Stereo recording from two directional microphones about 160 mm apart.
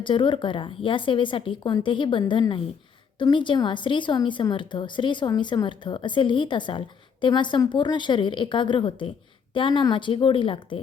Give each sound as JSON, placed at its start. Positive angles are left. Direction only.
{"t": 0.0, "sound": "a woman's voice", "side_deg": 30}